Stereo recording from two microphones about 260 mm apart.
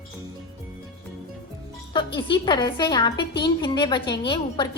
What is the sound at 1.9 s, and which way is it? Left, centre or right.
A woman's voice, centre.